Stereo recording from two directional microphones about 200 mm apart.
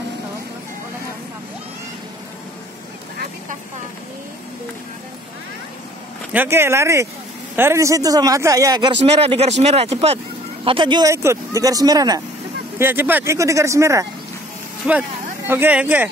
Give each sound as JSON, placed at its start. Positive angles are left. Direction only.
{"t": 6.3, "sound": "a man's voice", "side_deg": -10}
{"t": 9.0, "sound": "a man's voice", "side_deg": -30}